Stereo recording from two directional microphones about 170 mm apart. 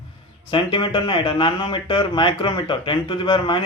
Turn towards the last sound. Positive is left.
turn(degrees=30)  # may be behind; listen again after turning